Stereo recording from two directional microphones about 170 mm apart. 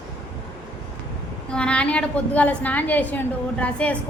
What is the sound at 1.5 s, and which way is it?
A woman's voice, 5° left (ahead or behind).